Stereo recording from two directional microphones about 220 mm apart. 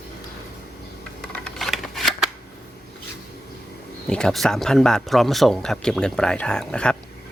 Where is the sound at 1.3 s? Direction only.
5° left (ahead or behind).